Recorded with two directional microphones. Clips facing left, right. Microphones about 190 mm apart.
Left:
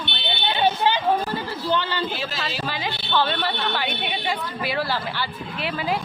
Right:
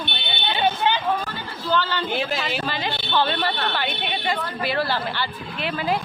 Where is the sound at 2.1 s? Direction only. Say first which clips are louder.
Right 5 dB; 60° right (ahead or behind).